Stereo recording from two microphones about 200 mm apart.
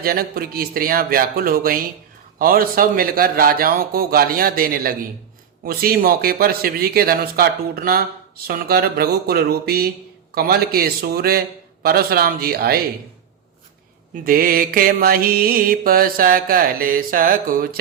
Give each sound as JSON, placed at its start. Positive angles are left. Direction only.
{"t": 0.0, "sound": "mantra", "side_deg": -50}
{"t": 14.3, "sound": "mantra", "side_deg": -45}